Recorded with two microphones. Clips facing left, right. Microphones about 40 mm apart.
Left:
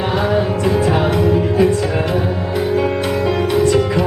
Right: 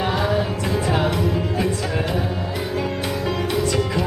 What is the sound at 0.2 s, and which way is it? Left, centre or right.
Music, left.